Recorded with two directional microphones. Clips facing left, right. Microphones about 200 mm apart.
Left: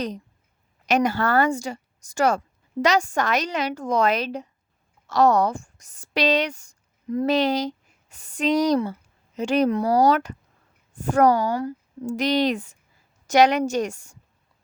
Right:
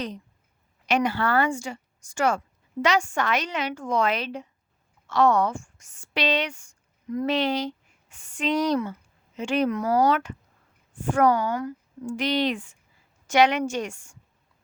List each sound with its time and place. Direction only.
0.9 s a woman's voice: 40° left (ahead or behind)